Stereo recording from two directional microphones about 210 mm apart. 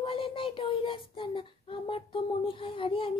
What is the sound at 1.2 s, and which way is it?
Child singing, 25° left (ahead or behind).